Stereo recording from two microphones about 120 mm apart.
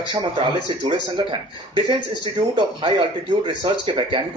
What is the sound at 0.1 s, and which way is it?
Speech, 40° right (ahead or behind).